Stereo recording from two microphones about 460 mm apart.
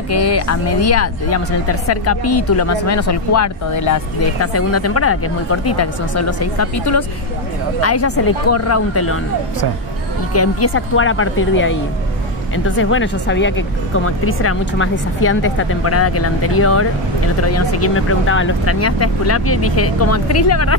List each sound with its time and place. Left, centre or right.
0.1 s speech: left
10.3 s speech: left